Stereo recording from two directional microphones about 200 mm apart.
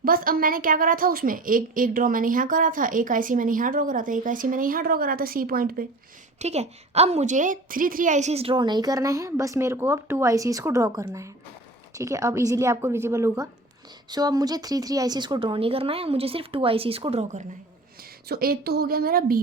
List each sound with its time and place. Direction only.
0.0 s a woman's voice: 45° right (ahead or behind)
6.4 s a woman's voice: 30° right (ahead or behind)
18.3 s a woman's voice: 50° right (ahead or behind)